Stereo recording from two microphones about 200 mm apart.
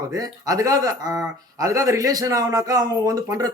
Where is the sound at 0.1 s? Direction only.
20° right (ahead or behind).